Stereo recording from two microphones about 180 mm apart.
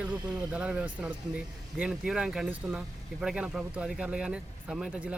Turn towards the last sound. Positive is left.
turn(degrees=-5)  # may be behind; listen again after turning